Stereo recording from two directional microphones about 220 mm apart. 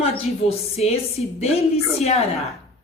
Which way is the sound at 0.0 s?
25° left (ahead or behind).